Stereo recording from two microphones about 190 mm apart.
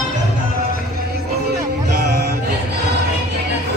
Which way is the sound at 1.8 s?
60° right (ahead or behind).